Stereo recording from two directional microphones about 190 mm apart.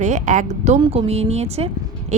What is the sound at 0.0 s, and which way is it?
Speech, 40° right (ahead or behind).